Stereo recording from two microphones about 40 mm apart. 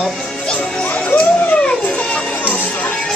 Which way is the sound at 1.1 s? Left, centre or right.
Left.